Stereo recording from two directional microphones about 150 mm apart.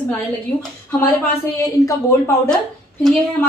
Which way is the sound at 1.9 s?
20° left (ahead or behind).